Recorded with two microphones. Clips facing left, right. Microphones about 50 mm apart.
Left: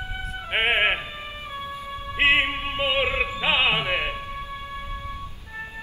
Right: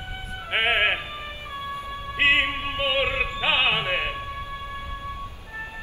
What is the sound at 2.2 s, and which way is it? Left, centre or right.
Music, centre.